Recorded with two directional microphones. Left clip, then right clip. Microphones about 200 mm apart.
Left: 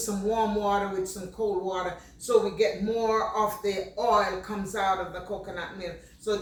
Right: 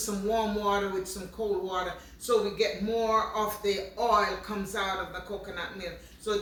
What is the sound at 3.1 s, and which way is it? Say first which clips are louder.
Speech: left 3 dB; 10° right (ahead or behind).